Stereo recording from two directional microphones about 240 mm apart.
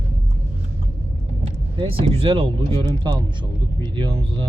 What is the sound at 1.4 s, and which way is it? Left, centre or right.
Speech, right.